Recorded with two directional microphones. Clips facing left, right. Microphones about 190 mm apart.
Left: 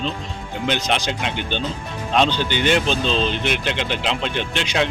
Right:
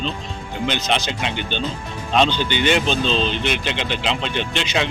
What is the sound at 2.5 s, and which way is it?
Speech, 45° left (ahead or behind).